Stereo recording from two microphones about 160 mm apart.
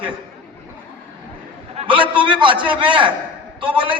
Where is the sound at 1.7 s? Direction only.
35° right (ahead or behind).